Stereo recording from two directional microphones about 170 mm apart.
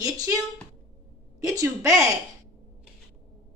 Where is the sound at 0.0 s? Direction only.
20° right (ahead or behind).